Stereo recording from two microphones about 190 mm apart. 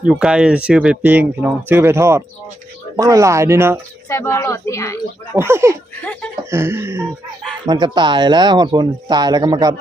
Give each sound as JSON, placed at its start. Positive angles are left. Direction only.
{"t": 0.0, "sound": "speech", "side_deg": -5}
{"t": 4.1, "sound": "speech", "side_deg": 15}
{"t": 5.4, "sound": "speech", "side_deg": -15}
{"t": 6.0, "sound": "speech", "side_deg": 10}
{"t": 6.5, "sound": "speech", "side_deg": -15}